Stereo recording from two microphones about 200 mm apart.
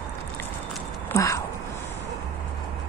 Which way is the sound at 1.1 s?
15° left (ahead or behind).